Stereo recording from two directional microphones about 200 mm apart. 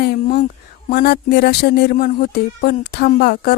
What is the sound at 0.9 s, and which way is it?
Speech, 50° left (ahead or behind).